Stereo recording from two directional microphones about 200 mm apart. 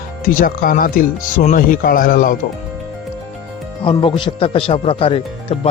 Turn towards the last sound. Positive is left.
turn(degrees=25)  # may be behind; listen again after turning